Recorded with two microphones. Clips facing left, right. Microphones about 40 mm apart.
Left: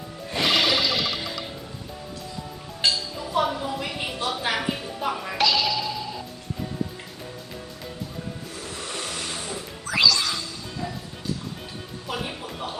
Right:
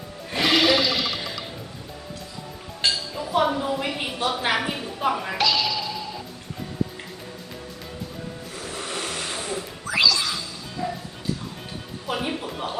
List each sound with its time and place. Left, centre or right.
0.3 s music: centre
2.8 s chink: centre
4.2 s music: centre
5.4 s music: centre
8.7 s vehicle: centre
9.8 s music: centre
12.2 s music: right